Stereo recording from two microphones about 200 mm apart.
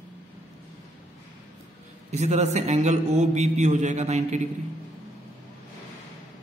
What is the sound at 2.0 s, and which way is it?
A man's voice, 35° right (ahead or behind).